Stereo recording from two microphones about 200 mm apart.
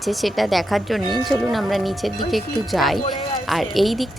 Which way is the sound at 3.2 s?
20° left (ahead or behind).